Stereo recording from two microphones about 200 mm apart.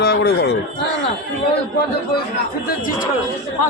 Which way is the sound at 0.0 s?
55° left (ahead or behind).